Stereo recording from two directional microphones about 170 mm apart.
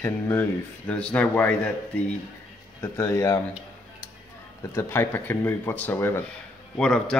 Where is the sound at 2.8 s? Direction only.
15° left (ahead or behind).